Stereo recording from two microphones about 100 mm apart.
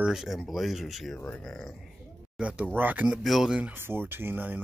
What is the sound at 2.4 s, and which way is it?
Speech, 10° right (ahead or behind).